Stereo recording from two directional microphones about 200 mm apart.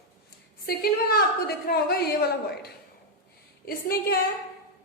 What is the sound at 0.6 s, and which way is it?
A woman's voice, 50° left (ahead or behind).